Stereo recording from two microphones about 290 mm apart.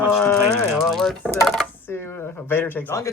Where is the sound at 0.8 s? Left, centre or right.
Centre.